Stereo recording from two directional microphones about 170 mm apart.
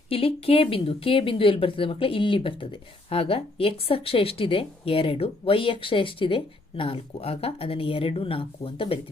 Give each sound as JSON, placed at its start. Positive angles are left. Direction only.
{"t": 0.1, "sound": "speech", "side_deg": 35}